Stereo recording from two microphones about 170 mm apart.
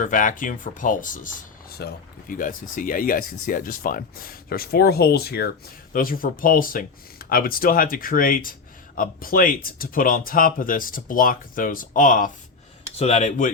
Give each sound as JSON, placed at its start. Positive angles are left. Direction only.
{"t": 0.0, "sound": "speech", "side_deg": 50}
{"t": 5.9, "sound": "speech", "side_deg": 55}
{"t": 13.0, "sound": "speech", "side_deg": 40}